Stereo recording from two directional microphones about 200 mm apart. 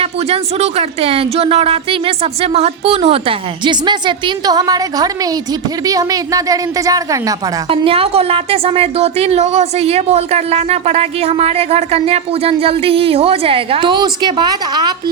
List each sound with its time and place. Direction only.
0.0 s speech: 30° right (ahead or behind)